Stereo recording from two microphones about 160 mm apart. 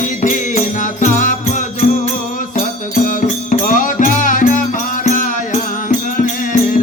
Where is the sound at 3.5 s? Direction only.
55° left (ahead or behind).